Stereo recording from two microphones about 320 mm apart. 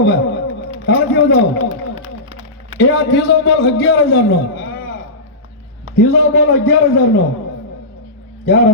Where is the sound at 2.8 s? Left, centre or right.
Left.